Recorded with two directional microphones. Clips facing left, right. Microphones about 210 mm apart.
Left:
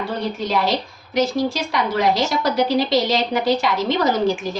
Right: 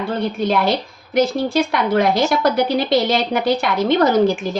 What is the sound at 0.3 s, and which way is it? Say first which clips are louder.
A woman's voice: right 3 dB; 55° right (ahead or behind).